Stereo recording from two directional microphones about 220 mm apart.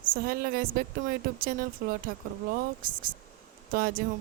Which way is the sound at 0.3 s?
40° right (ahead or behind).